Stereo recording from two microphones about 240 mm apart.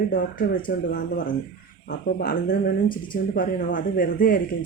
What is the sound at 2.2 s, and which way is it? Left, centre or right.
Speech, left.